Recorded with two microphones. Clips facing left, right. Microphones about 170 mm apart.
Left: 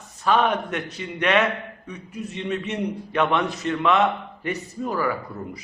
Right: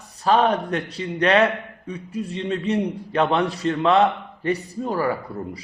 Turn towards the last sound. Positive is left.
turn(degrees=-30)  # may be behind; listen again after turning